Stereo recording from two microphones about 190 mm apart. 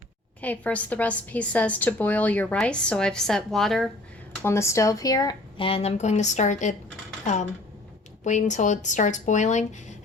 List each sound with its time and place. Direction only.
0.4 s a woman's voice: 10° left (ahead or behind)
4.4 s speech: 15° left (ahead or behind); by 6.7 s 40° left (ahead or behind)
8.2 s speech: 40° left (ahead or behind)